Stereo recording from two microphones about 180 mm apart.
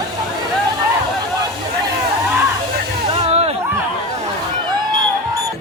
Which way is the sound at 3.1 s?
35° right (ahead or behind).